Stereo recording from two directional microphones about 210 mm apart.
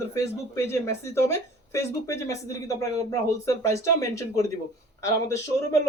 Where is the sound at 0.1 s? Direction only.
15° left (ahead or behind).